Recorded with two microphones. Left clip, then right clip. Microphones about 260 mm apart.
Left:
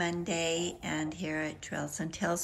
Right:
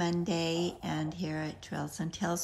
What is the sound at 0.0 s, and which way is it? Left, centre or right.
Speech, centre.